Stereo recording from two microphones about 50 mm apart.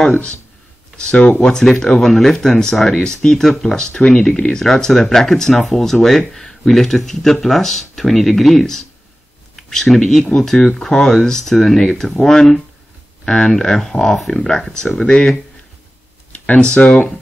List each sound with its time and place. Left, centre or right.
1.4 s speech: centre
16.6 s speech: centre